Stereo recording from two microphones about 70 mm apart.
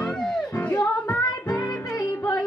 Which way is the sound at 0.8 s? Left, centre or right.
Left.